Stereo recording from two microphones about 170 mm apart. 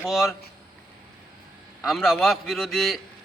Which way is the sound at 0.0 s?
Centre (ahead or behind).